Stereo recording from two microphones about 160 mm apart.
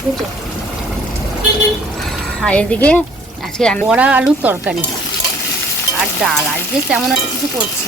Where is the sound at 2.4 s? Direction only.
10° left (ahead or behind).